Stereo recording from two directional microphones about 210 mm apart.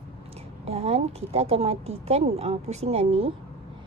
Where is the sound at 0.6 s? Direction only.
30° right (ahead or behind).